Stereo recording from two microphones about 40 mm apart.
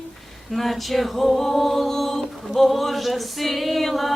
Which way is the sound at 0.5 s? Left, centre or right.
Centre.